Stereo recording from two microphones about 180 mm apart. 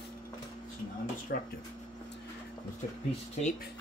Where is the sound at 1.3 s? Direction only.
55° left (ahead or behind).